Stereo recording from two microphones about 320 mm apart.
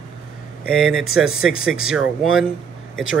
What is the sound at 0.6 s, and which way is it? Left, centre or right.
Speech, centre.